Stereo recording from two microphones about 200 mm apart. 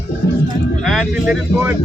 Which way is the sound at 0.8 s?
Centre (ahead or behind).